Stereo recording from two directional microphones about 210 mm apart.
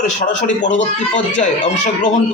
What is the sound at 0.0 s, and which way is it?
Speech, 35° left (ahead or behind).